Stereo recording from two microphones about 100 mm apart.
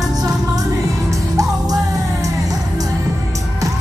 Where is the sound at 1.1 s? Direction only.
35° right (ahead or behind).